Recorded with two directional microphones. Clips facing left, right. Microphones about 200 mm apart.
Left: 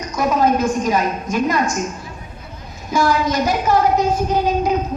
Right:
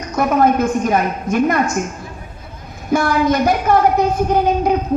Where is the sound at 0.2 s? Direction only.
55° right (ahead or behind).